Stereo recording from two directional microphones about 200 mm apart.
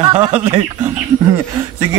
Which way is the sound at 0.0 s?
15° right (ahead or behind).